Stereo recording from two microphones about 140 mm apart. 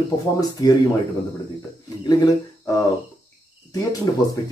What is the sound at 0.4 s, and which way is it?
Speech, 30° left (ahead or behind).